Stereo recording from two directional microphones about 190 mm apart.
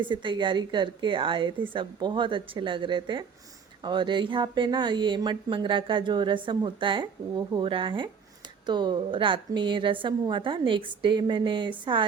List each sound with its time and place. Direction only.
0.0 s speech: 25° right (ahead or behind)